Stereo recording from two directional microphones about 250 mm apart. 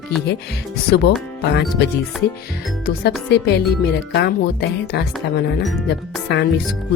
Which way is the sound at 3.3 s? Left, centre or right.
Left.